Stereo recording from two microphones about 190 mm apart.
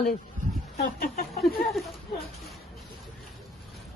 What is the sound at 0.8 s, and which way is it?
Chicken, 50° left (ahead or behind).